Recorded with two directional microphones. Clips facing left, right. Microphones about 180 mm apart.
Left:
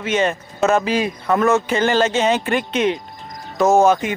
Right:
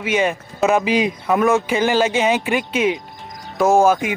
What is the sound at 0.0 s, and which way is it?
Speech, 10° right (ahead or behind).